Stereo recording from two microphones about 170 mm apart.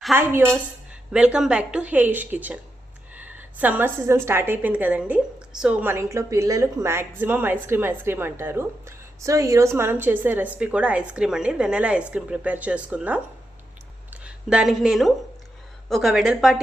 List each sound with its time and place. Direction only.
0.1 s a woman's voice: 10° right (ahead or behind)
14.5 s speech: centre (ahead or behind)